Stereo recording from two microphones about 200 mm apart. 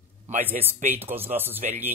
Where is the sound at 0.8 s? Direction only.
35° right (ahead or behind).